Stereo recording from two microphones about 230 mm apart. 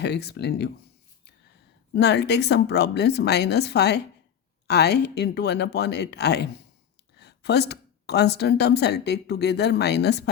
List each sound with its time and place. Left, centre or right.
0.0 s speech: left
1.9 s speech: left